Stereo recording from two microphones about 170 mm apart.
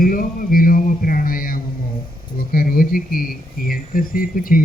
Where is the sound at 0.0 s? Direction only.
55° left (ahead or behind).